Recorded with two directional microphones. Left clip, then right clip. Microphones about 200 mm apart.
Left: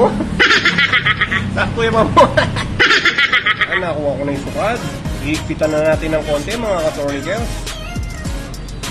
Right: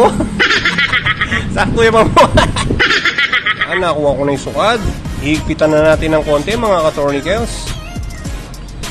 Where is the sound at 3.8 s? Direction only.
55° right (ahead or behind).